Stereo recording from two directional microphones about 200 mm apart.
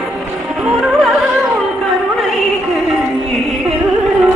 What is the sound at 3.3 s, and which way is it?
Music, centre (ahead or behind).